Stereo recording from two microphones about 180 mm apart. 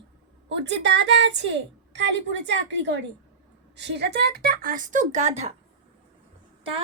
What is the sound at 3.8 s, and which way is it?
A woman's voice, 70° right (ahead or behind).